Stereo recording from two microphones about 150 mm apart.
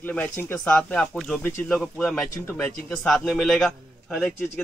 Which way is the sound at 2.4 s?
15° left (ahead or behind).